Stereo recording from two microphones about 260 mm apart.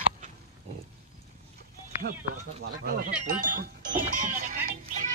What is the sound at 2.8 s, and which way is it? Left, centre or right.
Speech, right.